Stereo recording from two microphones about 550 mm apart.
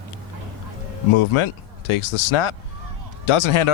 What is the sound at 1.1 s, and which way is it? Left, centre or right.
Speech, left.